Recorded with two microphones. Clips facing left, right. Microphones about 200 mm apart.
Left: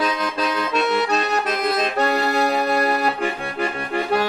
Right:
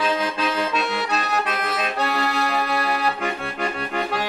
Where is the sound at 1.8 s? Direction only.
45° left (ahead or behind).